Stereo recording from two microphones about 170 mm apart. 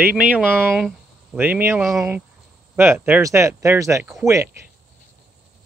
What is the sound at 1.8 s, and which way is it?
Speech, centre (ahead or behind).